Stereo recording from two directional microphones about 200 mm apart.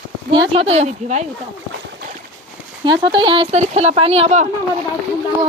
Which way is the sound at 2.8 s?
20° right (ahead or behind).